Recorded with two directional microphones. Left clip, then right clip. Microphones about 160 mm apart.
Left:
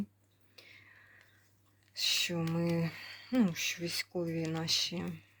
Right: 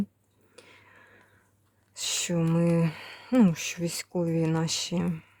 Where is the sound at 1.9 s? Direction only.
40° right (ahead or behind).